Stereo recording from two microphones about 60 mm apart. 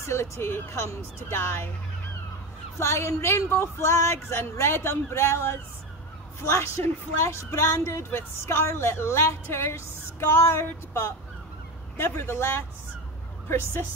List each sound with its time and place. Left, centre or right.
0.0 s a woman's voice: left
2.8 s a woman's voice: left
6.8 s a woman's voice: left